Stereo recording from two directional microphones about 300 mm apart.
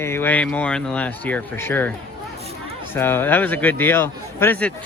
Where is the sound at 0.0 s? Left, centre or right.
Centre.